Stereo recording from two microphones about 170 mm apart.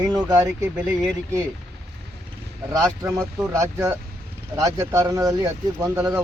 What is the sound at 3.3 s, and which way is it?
Speech, 15° right (ahead or behind).